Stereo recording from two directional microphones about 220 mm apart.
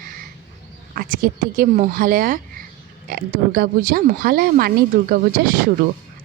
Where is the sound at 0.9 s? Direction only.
40° right (ahead or behind).